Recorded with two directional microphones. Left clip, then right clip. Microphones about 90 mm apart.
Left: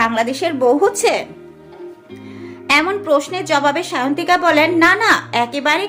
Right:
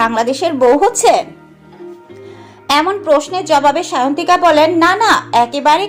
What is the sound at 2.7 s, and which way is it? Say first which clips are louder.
A woman's voice: right 3 dB; 20° right (ahead or behind).